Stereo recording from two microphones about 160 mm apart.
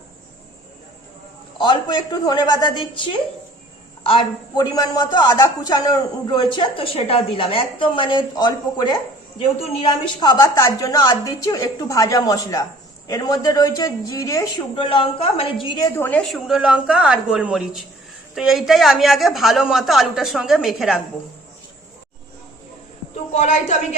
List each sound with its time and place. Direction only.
1.5 s speech: 30° left (ahead or behind)
14.8 s speech: 35° left (ahead or behind)
16.0 s a woman's voice: 10° left (ahead or behind)
16.3 s a woman's voice: 5° right (ahead or behind)
23.3 s a woman's voice: 45° left (ahead or behind)